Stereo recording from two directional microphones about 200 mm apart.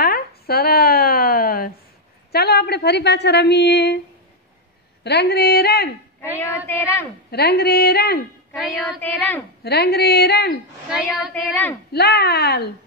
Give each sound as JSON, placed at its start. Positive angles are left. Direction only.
{"t": 0.0, "sound": "a sound", "side_deg": 50}
{"t": 2.3, "sound": "a woman's voice", "side_deg": 50}
{"t": 5.0, "sound": "speech", "side_deg": 55}
{"t": 6.7, "sound": "a woman's voice", "side_deg": 10}
{"t": 7.2, "sound": "speech", "side_deg": 55}
{"t": 8.5, "sound": "child singing", "side_deg": 0}
{"t": 9.6, "sound": "speech", "side_deg": 55}
{"t": 10.9, "sound": "child singing", "side_deg": 0}
{"t": 11.9, "sound": "speech", "side_deg": 55}